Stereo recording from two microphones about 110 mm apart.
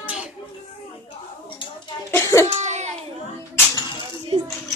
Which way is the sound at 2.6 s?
90° right.